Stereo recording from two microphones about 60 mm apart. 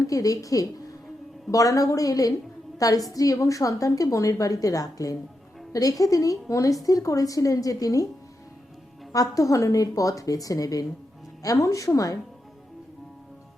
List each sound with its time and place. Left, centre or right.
0.0 s a woman's voice: left
5.7 s a woman's voice: left
9.1 s a woman's voice: left
11.4 s a woman's voice: left